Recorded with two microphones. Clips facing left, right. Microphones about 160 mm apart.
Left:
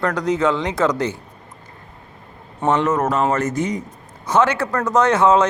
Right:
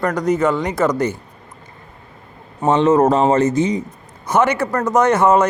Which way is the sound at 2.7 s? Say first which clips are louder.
Right 6 dB; 25° right (ahead or behind).